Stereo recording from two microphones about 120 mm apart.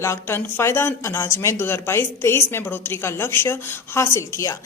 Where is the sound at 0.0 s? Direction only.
20° left (ahead or behind).